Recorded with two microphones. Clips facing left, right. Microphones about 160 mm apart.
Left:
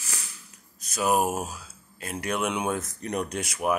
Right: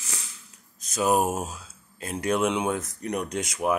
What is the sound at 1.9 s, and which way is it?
Speech, 30° right (ahead or behind).